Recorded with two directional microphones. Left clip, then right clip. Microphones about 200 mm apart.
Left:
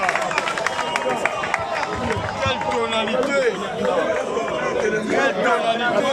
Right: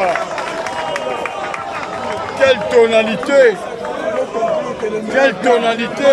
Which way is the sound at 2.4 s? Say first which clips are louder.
Right 13 dB; 50° right (ahead or behind).